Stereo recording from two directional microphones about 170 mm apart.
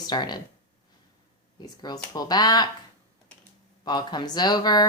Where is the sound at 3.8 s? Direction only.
25° left (ahead or behind).